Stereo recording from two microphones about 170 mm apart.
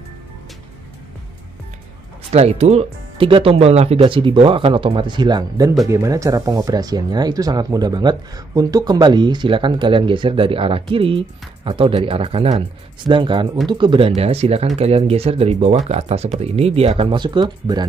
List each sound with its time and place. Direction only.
2.3 s speech: 40° right (ahead or behind)